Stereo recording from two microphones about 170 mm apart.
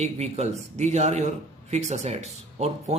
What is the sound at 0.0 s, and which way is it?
A man's voice, 40° right (ahead or behind).